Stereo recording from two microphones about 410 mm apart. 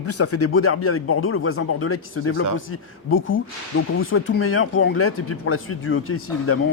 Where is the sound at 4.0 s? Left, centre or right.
Left.